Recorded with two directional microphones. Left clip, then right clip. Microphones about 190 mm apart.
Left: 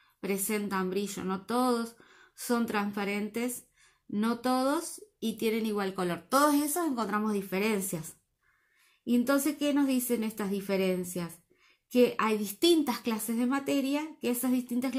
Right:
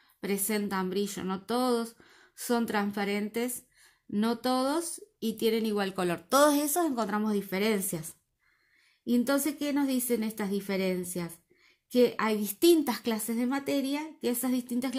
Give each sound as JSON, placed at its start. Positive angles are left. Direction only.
{"t": 0.2, "sound": "speech", "side_deg": -35}